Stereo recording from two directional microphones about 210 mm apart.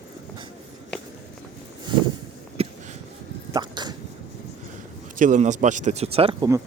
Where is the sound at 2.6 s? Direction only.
30° right (ahead or behind).